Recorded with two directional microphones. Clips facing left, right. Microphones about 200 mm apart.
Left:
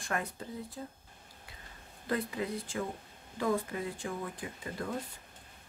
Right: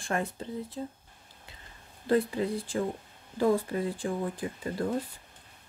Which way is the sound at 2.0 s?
30° right (ahead or behind).